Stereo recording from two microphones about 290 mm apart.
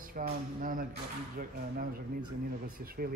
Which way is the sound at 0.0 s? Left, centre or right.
Right.